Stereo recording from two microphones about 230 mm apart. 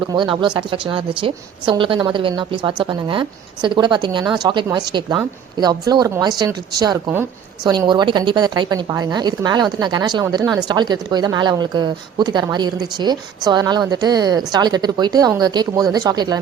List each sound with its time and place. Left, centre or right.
0.1 s a woman's voice: centre